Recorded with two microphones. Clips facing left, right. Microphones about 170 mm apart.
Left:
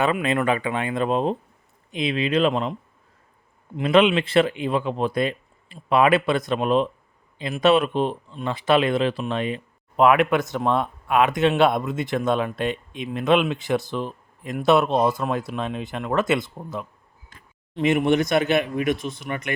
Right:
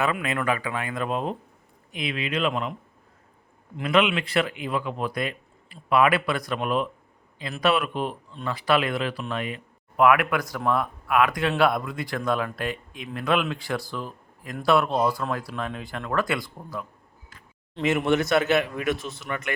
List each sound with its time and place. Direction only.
0.0 s speech: 25° left (ahead or behind)
3.8 s speech: 30° left (ahead or behind)